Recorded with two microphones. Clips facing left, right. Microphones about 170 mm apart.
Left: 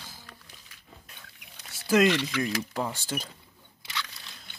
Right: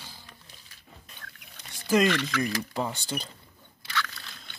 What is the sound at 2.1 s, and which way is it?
Speech, 10° left (ahead or behind).